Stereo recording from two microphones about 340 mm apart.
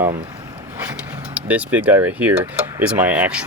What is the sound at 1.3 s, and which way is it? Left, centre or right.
Speech, centre.